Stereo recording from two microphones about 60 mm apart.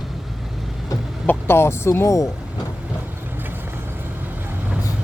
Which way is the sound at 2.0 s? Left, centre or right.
Left.